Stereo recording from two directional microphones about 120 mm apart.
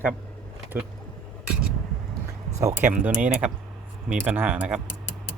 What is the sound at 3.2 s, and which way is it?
Speech, 10° right (ahead or behind).